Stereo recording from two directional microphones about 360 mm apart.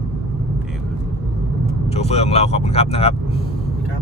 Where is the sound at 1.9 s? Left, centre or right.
Centre.